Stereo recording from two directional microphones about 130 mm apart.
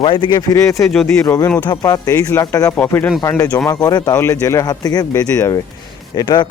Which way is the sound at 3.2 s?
25° left (ahead or behind).